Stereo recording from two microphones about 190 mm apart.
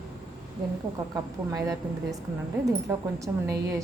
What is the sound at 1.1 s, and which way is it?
A woman's voice, 20° right (ahead or behind).